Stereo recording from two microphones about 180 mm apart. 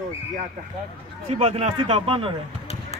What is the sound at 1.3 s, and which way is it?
A man's voice, 35° right (ahead or behind).